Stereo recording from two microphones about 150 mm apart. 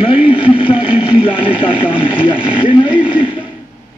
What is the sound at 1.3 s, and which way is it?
Radio, 35° left (ahead or behind).